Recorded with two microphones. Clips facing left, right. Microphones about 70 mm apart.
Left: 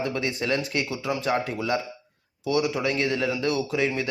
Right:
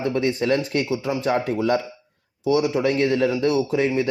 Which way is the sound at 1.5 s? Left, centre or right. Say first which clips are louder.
Right 6 dB; right.